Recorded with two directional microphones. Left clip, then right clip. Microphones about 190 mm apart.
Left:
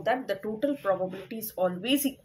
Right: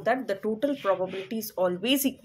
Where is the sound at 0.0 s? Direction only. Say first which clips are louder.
Right 2 dB; 20° right (ahead or behind).